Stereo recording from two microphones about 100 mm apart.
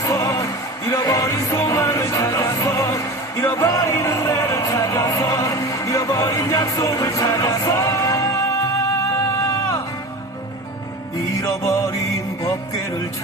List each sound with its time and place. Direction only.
0.0 s music: 35° left (ahead or behind)
11.3 s music: 30° left (ahead or behind)